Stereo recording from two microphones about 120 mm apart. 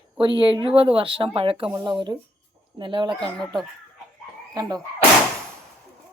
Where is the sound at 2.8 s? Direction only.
45° right (ahead or behind).